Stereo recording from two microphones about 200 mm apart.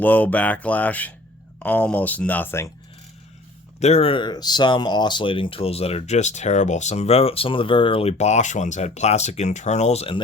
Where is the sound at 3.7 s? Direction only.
35° left (ahead or behind).